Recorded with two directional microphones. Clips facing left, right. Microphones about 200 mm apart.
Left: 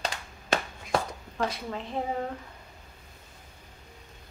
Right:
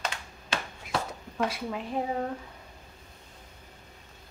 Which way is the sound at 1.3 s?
10° right (ahead or behind).